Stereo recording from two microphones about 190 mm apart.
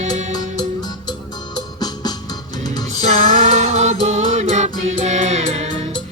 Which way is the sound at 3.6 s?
35° right (ahead or behind).